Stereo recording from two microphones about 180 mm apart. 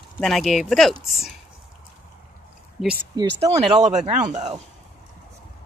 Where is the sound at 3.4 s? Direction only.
40° right (ahead or behind).